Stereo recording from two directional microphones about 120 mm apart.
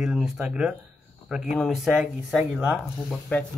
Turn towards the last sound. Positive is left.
turn(degrees=5)  # may be behind; listen again after turning